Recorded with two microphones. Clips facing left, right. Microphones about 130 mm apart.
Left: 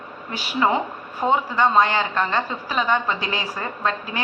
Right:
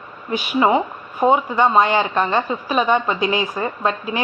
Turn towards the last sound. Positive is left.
turn(degrees=-20)  # may be behind; listen again after turning